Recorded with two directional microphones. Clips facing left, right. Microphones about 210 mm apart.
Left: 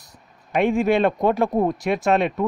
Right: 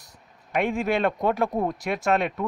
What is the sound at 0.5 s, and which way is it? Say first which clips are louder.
Speech: left 6 dB; 25° left (ahead or behind).